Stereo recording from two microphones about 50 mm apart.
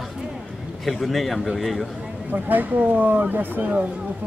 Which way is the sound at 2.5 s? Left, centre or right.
Right.